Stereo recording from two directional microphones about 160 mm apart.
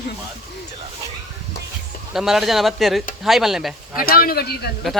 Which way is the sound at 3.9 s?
70° left (ahead or behind).